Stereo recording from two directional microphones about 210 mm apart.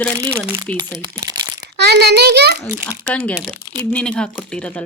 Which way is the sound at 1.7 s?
50° right (ahead or behind).